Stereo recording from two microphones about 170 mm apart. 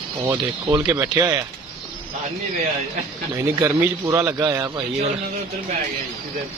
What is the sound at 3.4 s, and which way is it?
Speech, 15° right (ahead or behind).